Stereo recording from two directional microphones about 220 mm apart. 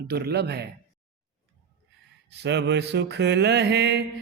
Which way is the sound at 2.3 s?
50° right (ahead or behind).